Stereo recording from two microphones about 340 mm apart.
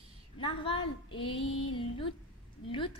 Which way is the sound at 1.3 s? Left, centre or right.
Left.